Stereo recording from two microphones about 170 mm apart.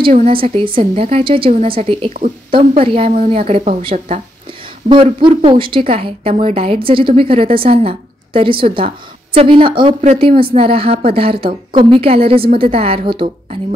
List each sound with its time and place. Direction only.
0.3 s a woman's voice: 30° right (ahead or behind)
5.2 s a woman's voice: 30° right (ahead or behind)